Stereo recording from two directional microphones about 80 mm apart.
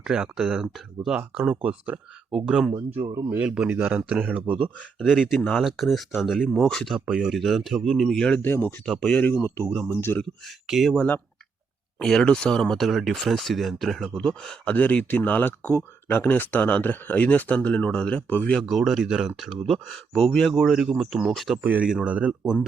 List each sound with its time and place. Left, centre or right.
0.0 s speech: centre
5.0 s speech: centre
5.4 s speech: centre
5.6 s speech: centre
8.4 s speech: left
8.9 s speech: centre
9.2 s speech: left
10.7 s speech: centre
10.9 s speech: centre
11.9 s speech: centre
18.6 s speech: centre
21.6 s speech: right